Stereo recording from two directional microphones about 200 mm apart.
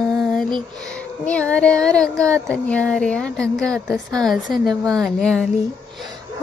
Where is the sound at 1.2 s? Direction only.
5° left (ahead or behind).